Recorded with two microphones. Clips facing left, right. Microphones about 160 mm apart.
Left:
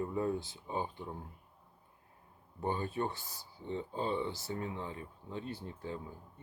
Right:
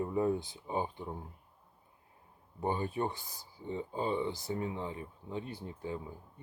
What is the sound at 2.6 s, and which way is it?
Speech, 15° right (ahead or behind).